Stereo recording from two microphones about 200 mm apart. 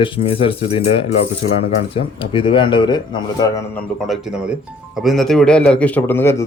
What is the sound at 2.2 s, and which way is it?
Speech, 25° left (ahead or behind).